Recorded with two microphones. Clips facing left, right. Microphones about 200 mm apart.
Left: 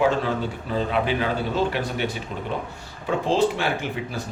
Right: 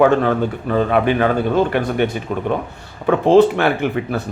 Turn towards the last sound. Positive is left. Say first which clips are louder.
# right 8 dB
turn(degrees=-60)  # may be behind; listen again after turning